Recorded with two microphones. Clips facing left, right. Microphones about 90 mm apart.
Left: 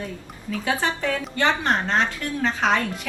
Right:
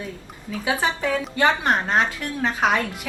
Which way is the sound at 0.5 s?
15° right (ahead or behind).